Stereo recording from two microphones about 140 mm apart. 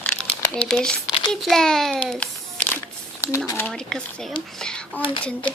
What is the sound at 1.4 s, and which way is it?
A child's voice, 5° left (ahead or behind).